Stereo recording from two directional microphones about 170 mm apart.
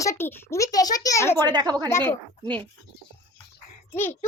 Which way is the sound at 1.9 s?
15° left (ahead or behind).